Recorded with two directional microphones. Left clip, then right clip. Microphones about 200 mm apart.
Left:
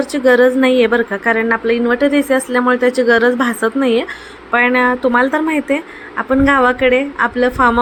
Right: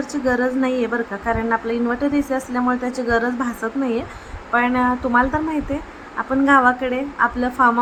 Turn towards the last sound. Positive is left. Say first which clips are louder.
# left 4 dB
turn(degrees=15)  # may be behind; listen again after turning